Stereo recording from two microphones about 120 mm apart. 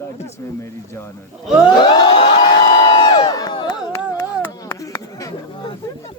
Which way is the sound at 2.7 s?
40° left (ahead or behind).